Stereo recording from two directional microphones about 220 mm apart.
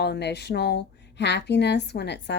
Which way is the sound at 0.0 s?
50° left (ahead or behind).